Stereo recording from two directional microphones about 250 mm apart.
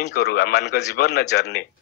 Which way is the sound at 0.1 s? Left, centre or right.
Left.